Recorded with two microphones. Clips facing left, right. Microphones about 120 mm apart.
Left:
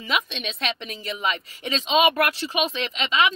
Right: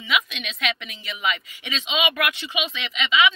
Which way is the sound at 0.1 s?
35° left (ahead or behind).